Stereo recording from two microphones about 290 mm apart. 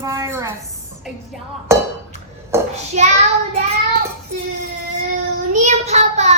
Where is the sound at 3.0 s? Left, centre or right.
Right.